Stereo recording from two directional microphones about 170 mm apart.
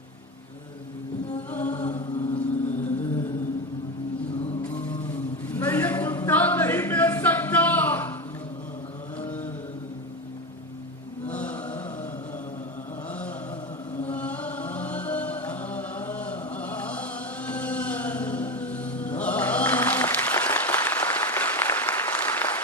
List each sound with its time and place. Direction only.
1.5 s chant: 10° left (ahead or behind)
1.9 s chant: 40° left (ahead or behind)
2.6 s music: 45° left (ahead or behind)
4.6 s music: 10° left (ahead or behind)
9.2 s chant: 10° left (ahead or behind)
11.3 s chant: 10° left (ahead or behind)
14.0 s music: 10° left (ahead or behind)